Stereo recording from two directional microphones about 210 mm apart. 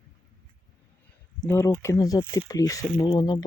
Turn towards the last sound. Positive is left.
turn(degrees=20)  # may be behind; listen again after turning